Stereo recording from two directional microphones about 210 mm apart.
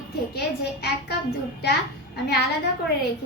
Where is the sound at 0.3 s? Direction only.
50° left (ahead or behind).